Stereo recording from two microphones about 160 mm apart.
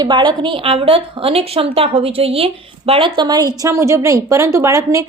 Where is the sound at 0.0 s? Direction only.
30° right (ahead or behind).